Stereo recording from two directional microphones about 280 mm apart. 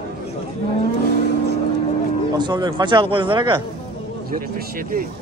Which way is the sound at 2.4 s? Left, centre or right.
Centre.